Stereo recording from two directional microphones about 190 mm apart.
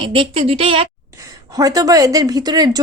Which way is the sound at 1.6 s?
20° right (ahead or behind).